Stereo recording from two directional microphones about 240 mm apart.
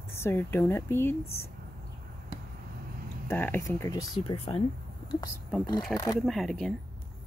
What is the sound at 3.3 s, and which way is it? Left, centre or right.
Speech, centre.